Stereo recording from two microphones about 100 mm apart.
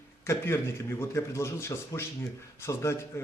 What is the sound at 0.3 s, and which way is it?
Speech, 25° left (ahead or behind).